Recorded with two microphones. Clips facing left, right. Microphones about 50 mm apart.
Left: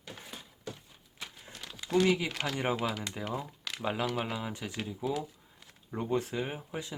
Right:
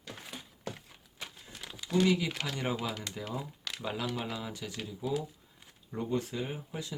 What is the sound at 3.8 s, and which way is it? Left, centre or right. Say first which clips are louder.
Speech: left 3 dB; left.